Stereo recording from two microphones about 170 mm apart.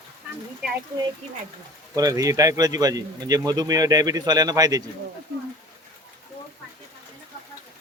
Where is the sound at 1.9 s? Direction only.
20° right (ahead or behind).